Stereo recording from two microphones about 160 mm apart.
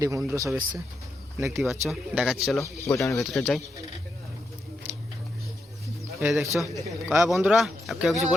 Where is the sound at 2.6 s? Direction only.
20° left (ahead or behind).